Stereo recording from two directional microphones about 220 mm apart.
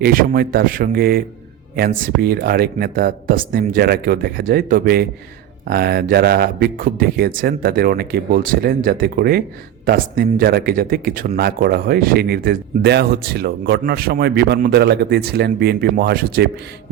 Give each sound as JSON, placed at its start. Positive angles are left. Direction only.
{"t": 0.0, "sound": "speech", "side_deg": -40}